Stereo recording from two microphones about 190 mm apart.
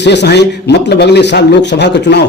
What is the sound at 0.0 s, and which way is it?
A man's voice, 65° left (ahead or behind).